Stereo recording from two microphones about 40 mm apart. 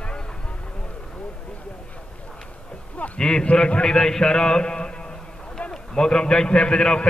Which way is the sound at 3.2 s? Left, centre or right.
Centre.